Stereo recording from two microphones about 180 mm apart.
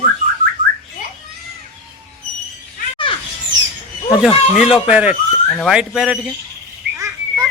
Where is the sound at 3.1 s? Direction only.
30° left (ahead or behind).